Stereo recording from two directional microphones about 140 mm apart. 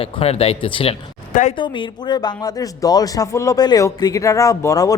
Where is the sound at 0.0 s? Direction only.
45° left (ahead or behind).